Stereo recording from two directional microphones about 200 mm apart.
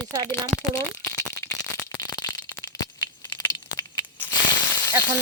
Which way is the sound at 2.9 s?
20° left (ahead or behind).